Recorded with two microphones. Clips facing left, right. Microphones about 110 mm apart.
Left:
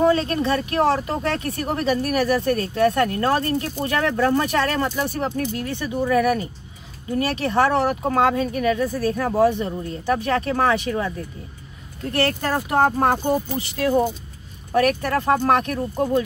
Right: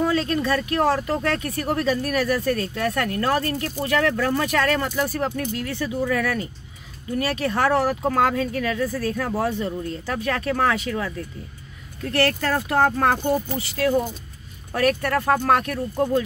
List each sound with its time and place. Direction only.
0.1 s speech: 25° left (ahead or behind)
2.5 s speech: 30° left (ahead or behind)